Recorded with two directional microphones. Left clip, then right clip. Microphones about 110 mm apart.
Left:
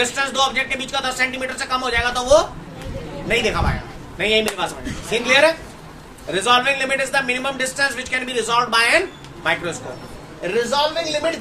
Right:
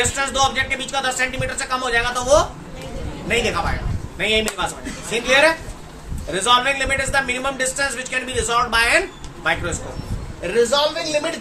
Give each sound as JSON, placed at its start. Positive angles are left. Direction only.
{"t": 0.0, "sound": "a man's voice", "side_deg": 15}